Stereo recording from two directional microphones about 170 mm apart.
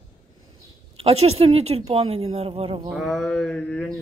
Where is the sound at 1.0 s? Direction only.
35° right (ahead or behind).